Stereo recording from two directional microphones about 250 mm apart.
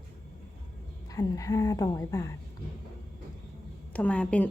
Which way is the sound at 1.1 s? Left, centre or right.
Centre.